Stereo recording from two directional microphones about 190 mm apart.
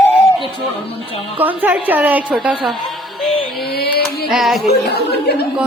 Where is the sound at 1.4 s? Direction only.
10° right (ahead or behind).